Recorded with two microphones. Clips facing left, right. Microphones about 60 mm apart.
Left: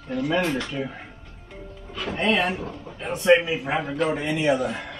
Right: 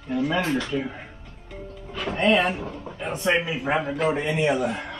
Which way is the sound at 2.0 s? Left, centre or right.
Centre.